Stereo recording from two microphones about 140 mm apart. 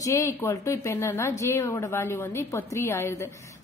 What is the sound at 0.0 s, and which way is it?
A woman's voice, 20° left (ahead or behind).